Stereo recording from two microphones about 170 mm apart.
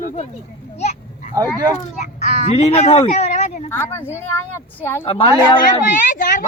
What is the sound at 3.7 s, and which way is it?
Speech, 15° left (ahead or behind).